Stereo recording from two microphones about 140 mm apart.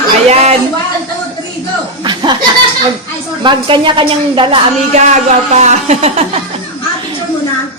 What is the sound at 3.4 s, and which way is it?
A woman's voice, 35° right (ahead or behind).